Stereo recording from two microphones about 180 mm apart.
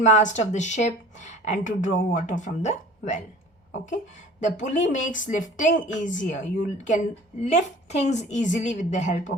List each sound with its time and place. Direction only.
0.0 s speech: 40° left (ahead or behind)
4.4 s a woman's voice: 40° left (ahead or behind)